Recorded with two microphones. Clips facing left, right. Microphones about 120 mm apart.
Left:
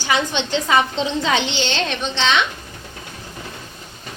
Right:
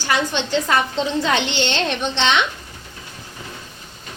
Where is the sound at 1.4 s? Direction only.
60° right (ahead or behind).